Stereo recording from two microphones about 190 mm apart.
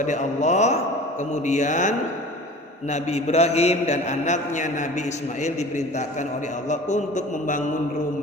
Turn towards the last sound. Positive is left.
turn(degrees=40)  # may be behind; listen again after turning